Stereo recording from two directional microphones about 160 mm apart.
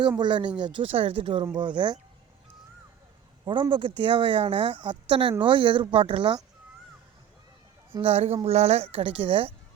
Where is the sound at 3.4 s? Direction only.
30° right (ahead or behind).